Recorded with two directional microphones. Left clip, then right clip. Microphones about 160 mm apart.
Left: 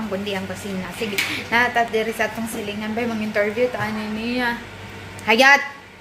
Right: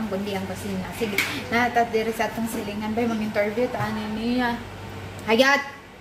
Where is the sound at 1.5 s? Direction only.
10° left (ahead or behind).